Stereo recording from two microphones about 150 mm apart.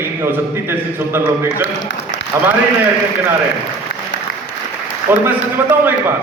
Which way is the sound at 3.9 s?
90° left.